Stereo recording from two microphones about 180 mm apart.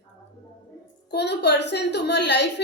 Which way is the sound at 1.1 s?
70° left (ahead or behind).